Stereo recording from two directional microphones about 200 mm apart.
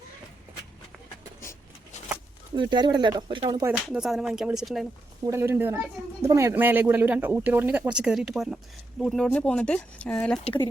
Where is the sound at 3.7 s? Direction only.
Centre (ahead or behind).